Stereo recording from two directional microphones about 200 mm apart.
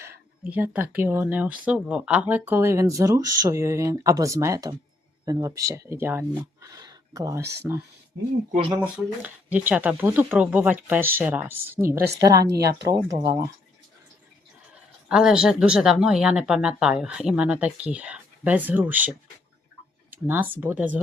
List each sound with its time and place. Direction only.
0.0 s speech: 10° right (ahead or behind)
8.5 s speech: 25° right (ahead or behind)
8.8 s speech: 10° right (ahead or behind)
12.5 s speech: 55° right (ahead or behind)
12.9 s speech: 15° right (ahead or behind)
14.7 s speech: 5° right (ahead or behind)